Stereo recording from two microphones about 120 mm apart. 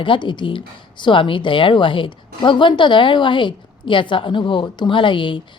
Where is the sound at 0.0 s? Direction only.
45° left (ahead or behind).